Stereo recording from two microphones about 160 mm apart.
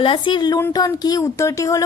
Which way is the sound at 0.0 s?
30° left (ahead or behind).